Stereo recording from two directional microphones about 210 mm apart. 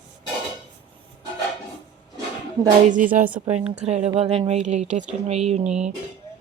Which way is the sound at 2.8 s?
40° right (ahead or behind).